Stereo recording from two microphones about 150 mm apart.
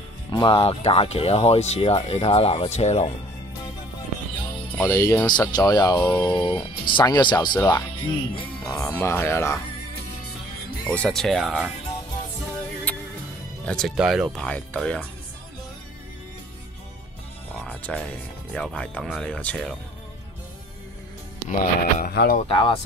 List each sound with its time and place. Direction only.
0.3 s speech: 30° left (ahead or behind); by 3.1 s 50° left (ahead or behind)
4.7 s speech: 20° left (ahead or behind)
8.6 s speech: 15° left (ahead or behind)
10.9 s speech: 5° left (ahead or behind)
12.9 s music: 10° left (ahead or behind)
13.7 s speech: 5° left (ahead or behind)
17.6 s music: 10° left (ahead or behind)
18.5 s speech: 5° left (ahead or behind)
21.5 s speech: 65° left (ahead or behind); by 22.4 s 80° left
22.5 s speech: 35° left (ahead or behind)